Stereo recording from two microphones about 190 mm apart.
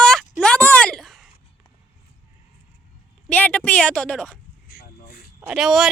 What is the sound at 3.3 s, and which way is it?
Speech, 10° left (ahead or behind).